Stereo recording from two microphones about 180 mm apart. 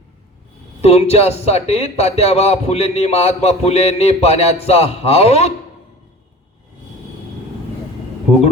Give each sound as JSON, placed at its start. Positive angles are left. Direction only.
{"t": 0.8, "sound": "a man's voice", "side_deg": 35}